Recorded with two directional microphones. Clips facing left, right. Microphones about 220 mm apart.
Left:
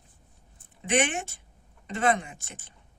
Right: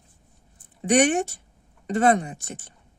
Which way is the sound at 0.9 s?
40° right (ahead or behind).